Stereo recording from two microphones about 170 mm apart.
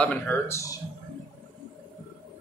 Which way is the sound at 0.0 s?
10° left (ahead or behind).